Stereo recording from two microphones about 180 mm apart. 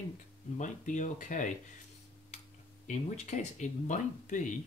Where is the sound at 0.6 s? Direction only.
45° left (ahead or behind).